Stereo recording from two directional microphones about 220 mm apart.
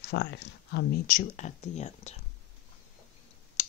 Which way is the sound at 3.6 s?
35° left (ahead or behind).